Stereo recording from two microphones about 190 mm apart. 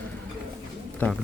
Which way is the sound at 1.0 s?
10° left (ahead or behind).